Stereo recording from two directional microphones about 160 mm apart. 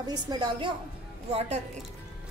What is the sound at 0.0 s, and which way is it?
Speech, 25° right (ahead or behind).